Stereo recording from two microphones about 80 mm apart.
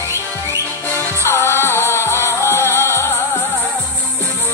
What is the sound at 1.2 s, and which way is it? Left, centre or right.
Music, left.